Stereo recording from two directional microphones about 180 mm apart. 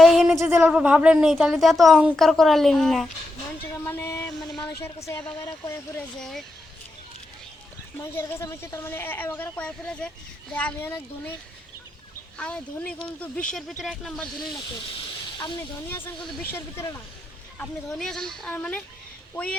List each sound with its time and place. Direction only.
0.0 s a sound: centre (ahead or behind)
0.5 s a woman's voice: 5° right (ahead or behind)
3.8 s a sound: 15° left (ahead or behind)
5.0 s speech: 15° left (ahead or behind)
6.1 s a woman's voice: centre (ahead or behind)
7.9 s speech: 15° left (ahead or behind)
12.4 s a woman's voice: 5° left (ahead or behind)
14.9 s hiss: 25° left (ahead or behind)
16.5 s speech: 15° left (ahead or behind)
17.6 s a woman's voice: centre (ahead or behind)